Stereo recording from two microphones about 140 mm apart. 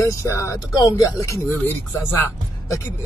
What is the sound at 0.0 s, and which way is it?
Speech, 20° left (ahead or behind).